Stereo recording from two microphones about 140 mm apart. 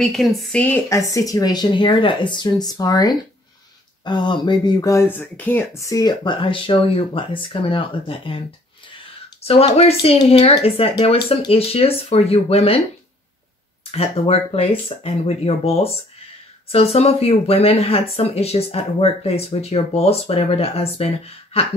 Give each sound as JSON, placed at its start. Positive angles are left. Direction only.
{"t": 0.0, "sound": "a woman's voice", "side_deg": 0}
{"t": 0.8, "sound": "speech", "side_deg": 20}
{"t": 13.9, "sound": "speech", "side_deg": 45}